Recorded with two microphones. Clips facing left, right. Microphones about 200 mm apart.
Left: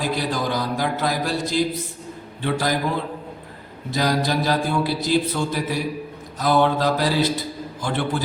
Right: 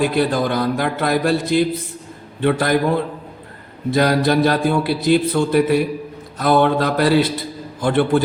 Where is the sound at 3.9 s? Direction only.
60° right (ahead or behind).